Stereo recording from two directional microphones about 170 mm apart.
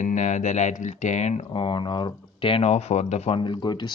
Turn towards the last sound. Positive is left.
turn(degrees=25)  # may be behind; listen again after turning